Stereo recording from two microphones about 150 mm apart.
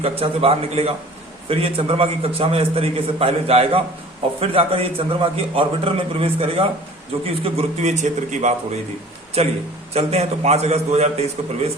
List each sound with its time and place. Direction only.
0.0 s a man's voice: 40° right (ahead or behind)